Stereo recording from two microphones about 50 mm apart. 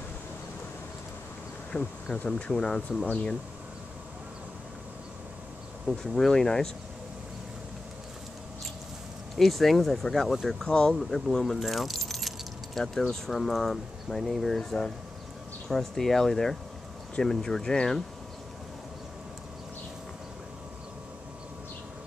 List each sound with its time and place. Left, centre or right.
1.7 s speech: left
2.5 s speech: centre
5.9 s speech: centre
9.4 s speech: centre
10.7 s speech: centre
11.1 s keys jangling: centre
13.3 s speech: centre